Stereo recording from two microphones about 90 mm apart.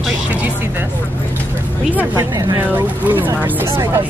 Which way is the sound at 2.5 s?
20° right (ahead or behind).